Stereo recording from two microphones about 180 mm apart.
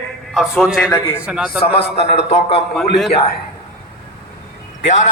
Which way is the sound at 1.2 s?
5° right (ahead or behind).